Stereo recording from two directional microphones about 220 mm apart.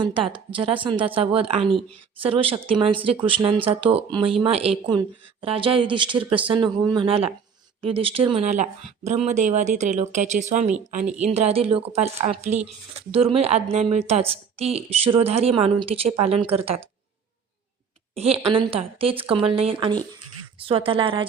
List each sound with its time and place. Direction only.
0.0 s a woman's voice: 20° right (ahead or behind)
18.1 s a woman's voice: 25° right (ahead or behind)